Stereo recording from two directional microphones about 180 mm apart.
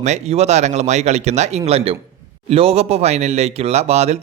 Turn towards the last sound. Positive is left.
turn(degrees=-35)  # may be behind; listen again after turning